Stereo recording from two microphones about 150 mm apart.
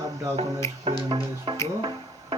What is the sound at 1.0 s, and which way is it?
Music, 30° right (ahead or behind).